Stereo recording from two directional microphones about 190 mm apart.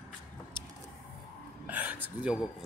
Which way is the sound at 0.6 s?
25° left (ahead or behind).